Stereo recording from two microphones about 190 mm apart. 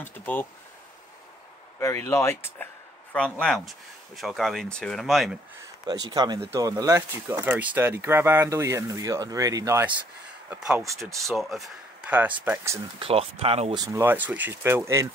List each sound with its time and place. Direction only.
0.0 s speech: 10° left (ahead or behind)
1.8 s speech: 15° left (ahead or behind)
5.9 s speech: 20° right (ahead or behind)
10.5 s speech: 5° right (ahead or behind)
13.0 s speech: 30° right (ahead or behind)
13.8 s speech: 10° right (ahead or behind)